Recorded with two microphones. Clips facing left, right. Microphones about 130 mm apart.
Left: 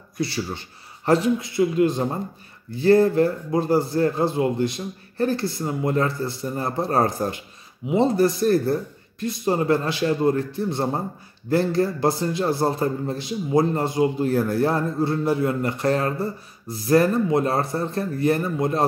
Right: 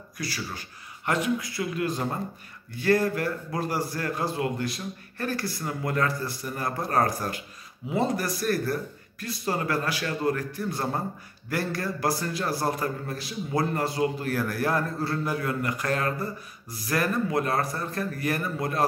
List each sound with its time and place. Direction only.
0.2 s a man's voice: 25° left (ahead or behind)